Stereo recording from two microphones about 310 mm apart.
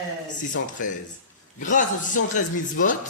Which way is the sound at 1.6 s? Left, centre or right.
Left.